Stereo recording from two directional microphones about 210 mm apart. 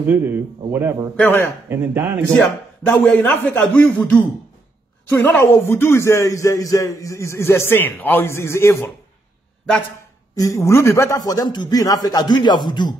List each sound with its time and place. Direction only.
0.7 s speech: 10° right (ahead or behind)
1.1 s a man's voice: 10° left (ahead or behind)
1.7 s speech: 10° right (ahead or behind)
2.3 s a man's voice: 5° left (ahead or behind)
10.3 s a man's voice: 15° left (ahead or behind)